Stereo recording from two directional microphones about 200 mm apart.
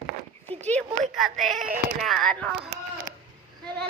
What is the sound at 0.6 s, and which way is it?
Speech, 5° left (ahead or behind).